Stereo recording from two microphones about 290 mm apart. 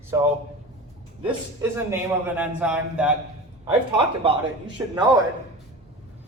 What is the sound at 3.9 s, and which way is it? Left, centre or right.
Speech, centre.